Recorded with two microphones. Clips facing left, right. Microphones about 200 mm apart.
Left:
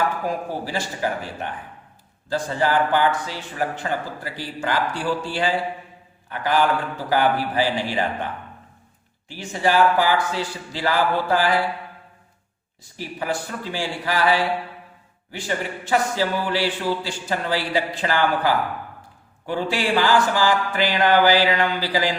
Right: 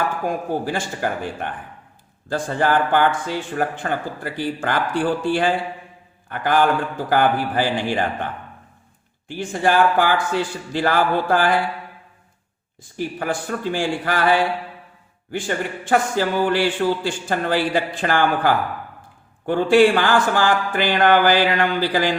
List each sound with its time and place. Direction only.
0.6 s a man's voice: 50° right (ahead or behind)
9.2 s a man's voice: 50° right (ahead or behind)
13.0 s a man's voice: 50° right (ahead or behind)